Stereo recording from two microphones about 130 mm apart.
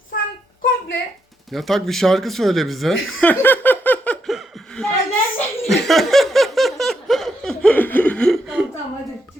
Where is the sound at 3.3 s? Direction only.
15° left (ahead or behind).